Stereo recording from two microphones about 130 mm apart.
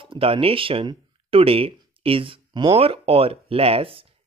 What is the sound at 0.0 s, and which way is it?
Speech, 45° right (ahead or behind).